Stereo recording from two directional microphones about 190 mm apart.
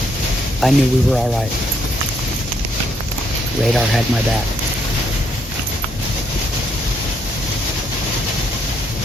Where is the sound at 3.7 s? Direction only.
Centre (ahead or behind).